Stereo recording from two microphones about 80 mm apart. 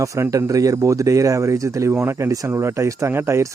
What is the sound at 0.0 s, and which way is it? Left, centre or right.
Speech, right.